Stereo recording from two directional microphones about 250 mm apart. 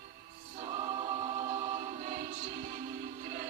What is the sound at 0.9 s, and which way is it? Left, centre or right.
Music, right.